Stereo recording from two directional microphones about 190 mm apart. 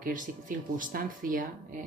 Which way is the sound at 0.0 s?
45° right (ahead or behind).